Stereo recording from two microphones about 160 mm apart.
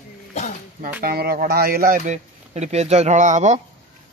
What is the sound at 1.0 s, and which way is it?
Speech, 75° right (ahead or behind).